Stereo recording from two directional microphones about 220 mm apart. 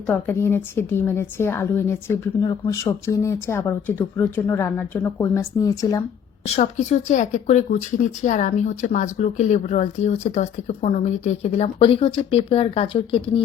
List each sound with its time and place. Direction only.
0.1 s a woman's voice: 10° left (ahead or behind)
6.6 s speech: 35° left (ahead or behind)